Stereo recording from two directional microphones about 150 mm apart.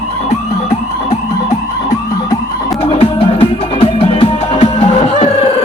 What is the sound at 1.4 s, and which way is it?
Music, 25° left (ahead or behind).